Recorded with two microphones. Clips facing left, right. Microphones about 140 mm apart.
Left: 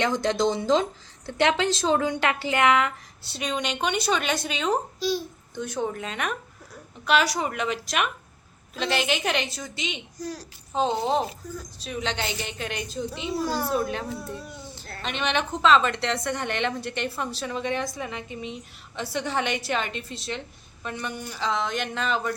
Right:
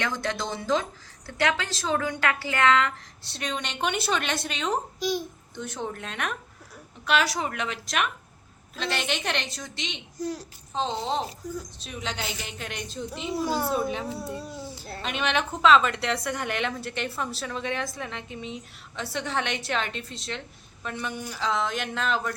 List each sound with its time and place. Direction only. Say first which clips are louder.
0.0 s speech: left 7 dB; 25° left (ahead or behind)
3.2 s a woman's voice: left 4 dB; centre (ahead or behind)
4.9 s speech: left 1 dB; 15° right (ahead or behind)
5.5 s a woman's voice: left 5 dB; centre (ahead or behind)
10.2 s a child's voice: right 6 dB; 25° right (ahead or behind)
10.8 s a woman's voice: left 4 dB; 10° left (ahead or behind)